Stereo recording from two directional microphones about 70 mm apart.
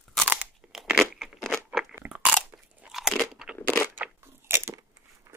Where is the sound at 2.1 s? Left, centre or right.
Centre.